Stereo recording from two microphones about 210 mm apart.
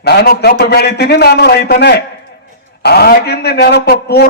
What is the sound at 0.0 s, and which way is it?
A man's voice, 50° left (ahead or behind).